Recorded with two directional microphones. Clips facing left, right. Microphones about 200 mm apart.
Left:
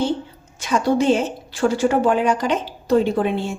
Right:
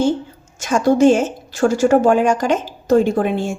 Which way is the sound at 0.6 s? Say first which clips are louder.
Right 5 dB; 45° right (ahead or behind).